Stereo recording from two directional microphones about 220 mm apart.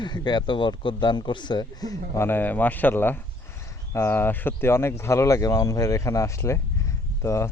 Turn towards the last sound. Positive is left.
turn(degrees=10)  # may be behind; listen again after turning